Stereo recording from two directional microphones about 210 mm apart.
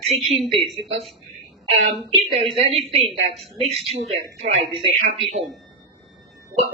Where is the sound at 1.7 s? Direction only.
30° right (ahead or behind).